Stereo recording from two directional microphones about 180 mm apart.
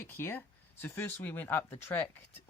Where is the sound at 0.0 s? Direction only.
10° left (ahead or behind).